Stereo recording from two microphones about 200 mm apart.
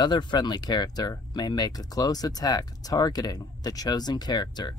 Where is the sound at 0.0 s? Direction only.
20° left (ahead or behind).